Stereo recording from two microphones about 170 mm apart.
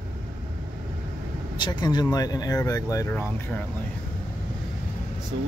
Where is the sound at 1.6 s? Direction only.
25° left (ahead or behind).